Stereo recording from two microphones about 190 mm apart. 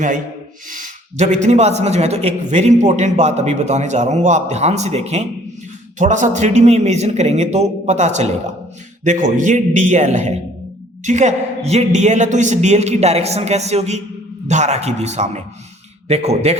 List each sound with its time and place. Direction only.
0.7 s speech: 40° right (ahead or behind)